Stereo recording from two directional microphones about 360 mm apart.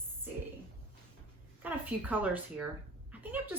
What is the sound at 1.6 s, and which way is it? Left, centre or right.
Speech, centre.